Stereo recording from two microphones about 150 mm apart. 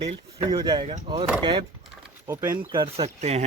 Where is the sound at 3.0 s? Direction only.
45° right (ahead or behind).